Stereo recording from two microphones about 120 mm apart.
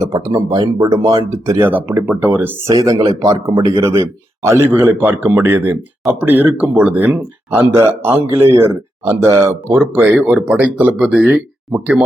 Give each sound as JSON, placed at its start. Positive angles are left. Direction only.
{"t": 0.0, "sound": "speech", "side_deg": -30}